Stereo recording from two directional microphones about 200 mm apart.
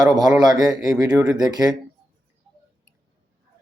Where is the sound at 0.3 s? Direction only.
20° right (ahead or behind).